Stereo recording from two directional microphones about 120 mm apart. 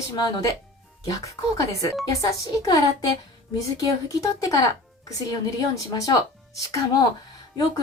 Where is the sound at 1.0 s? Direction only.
30° left (ahead or behind).